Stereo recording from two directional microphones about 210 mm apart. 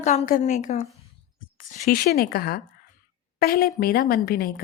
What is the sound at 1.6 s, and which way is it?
A woman's voice, 45° left (ahead or behind).